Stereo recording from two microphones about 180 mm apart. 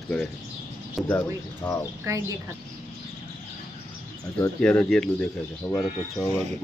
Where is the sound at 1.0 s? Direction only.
10° left (ahead or behind).